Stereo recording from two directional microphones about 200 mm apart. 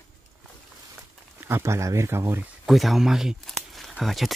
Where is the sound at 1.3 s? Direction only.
15° right (ahead or behind).